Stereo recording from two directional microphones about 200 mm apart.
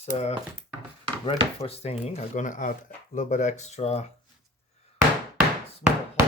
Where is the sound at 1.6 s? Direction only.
30° left (ahead or behind).